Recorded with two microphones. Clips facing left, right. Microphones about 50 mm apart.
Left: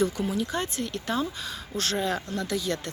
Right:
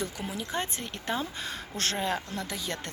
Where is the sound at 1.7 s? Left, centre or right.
Right.